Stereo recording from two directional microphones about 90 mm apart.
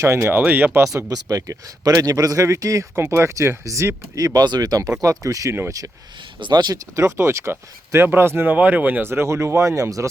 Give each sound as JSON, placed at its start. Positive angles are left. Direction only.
{"t": 0.0, "sound": "speech", "side_deg": -30}
{"t": 0.8, "sound": "speech", "side_deg": -30}
{"t": 6.4, "sound": "speech", "side_deg": -50}
{"t": 6.9, "sound": "speech", "side_deg": -35}